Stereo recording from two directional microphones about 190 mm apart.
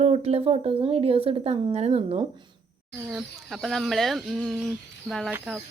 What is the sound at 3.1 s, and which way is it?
Speech, centre (ahead or behind).